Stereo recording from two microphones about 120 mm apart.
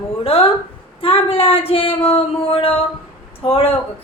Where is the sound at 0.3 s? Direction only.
50° left (ahead or behind).